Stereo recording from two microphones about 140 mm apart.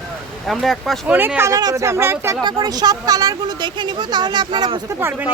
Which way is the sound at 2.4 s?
30° right (ahead or behind).